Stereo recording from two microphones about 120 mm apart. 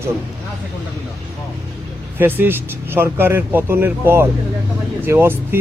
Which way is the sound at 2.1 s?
15° right (ahead or behind).